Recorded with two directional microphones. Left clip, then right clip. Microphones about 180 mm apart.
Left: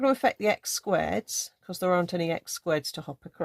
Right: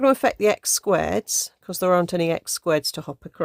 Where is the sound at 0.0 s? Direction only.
40° right (ahead or behind).